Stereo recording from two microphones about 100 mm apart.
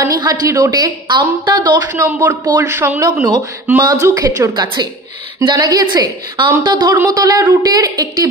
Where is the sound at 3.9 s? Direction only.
35° right (ahead or behind).